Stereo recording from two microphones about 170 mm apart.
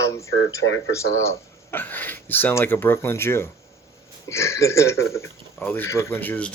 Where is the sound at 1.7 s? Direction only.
10° left (ahead or behind).